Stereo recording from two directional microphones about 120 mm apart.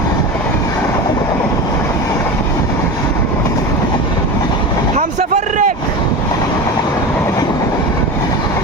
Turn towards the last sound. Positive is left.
turn(degrees=30)  # may be behind; listen again after turning